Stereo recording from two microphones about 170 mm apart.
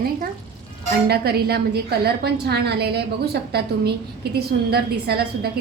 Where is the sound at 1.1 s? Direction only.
70° right (ahead or behind).